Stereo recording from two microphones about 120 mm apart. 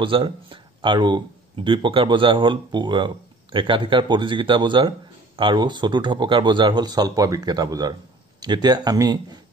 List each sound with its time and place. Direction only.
0.0 s speech: 45° right (ahead or behind)